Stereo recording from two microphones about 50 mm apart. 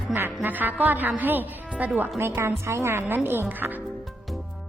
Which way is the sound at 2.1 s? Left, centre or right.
Right.